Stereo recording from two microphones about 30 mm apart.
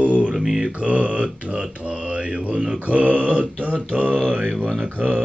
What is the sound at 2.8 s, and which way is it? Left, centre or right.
Speech, right.